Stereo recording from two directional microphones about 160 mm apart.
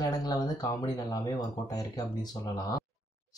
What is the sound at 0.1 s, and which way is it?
Speech, 25° left (ahead or behind).